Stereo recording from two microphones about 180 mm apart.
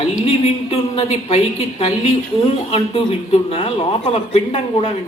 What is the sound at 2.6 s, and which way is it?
Speech, 30° left (ahead or behind).